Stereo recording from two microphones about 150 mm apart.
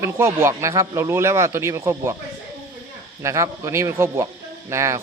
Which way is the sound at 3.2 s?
20° right (ahead or behind).